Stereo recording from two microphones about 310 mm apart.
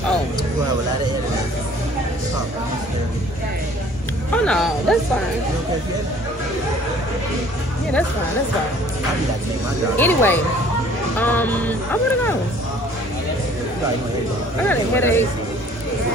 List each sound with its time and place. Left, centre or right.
4.3 s speech: centre
9.9 s speech: centre
14.7 s speech: centre